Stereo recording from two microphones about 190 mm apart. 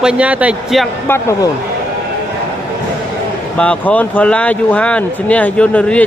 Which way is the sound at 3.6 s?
5° left (ahead or behind).